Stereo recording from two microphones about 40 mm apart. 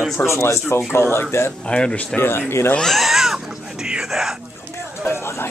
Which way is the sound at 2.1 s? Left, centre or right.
Left.